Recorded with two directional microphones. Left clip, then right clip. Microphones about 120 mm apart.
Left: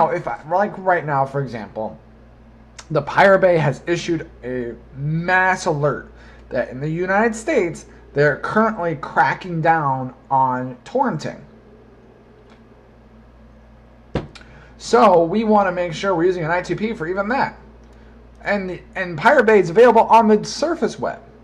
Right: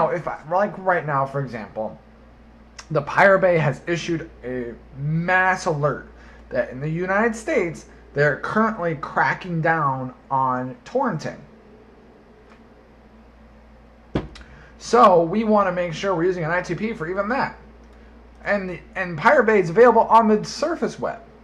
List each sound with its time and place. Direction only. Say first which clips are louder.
0.0 s speech: left 3 dB; 40° left (ahead or behind)
14.3 s speech: left 2 dB; 40° left (ahead or behind)